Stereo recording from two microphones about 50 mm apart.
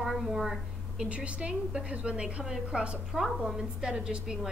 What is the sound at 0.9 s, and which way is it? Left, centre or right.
A woman's voice, right.